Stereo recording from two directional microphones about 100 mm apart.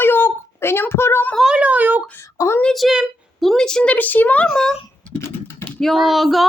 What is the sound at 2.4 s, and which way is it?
Speech, 25° left (ahead or behind).